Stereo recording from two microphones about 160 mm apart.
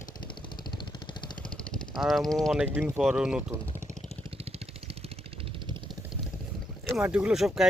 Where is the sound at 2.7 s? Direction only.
15° right (ahead or behind).